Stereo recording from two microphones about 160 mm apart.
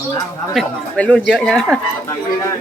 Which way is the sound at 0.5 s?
10° left (ahead or behind).